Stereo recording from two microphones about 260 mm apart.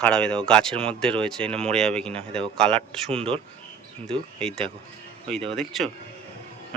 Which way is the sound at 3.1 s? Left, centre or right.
Right.